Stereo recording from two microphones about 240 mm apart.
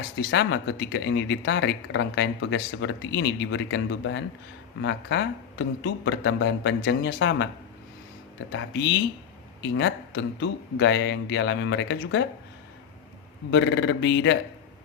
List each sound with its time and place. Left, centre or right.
0.2 s speech: left
8.5 s speech: left
13.5 s speech: left